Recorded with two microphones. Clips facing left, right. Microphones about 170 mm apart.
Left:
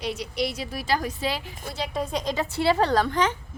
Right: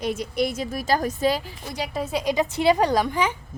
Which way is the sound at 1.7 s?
5° right (ahead or behind).